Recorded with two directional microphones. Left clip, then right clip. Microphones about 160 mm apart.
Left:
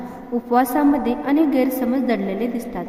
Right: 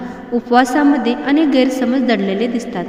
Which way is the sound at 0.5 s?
15° right (ahead or behind).